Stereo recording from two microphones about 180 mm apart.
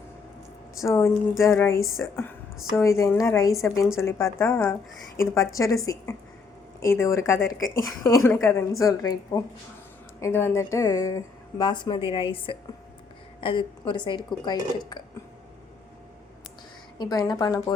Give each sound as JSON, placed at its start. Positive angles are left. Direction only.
{"t": 0.9, "sound": "a woman's voice", "side_deg": 15}
{"t": 3.5, "sound": "a woman's voice", "side_deg": 0}
{"t": 4.0, "sound": "a woman's voice", "side_deg": 15}
{"t": 17.0, "sound": "speech", "side_deg": 20}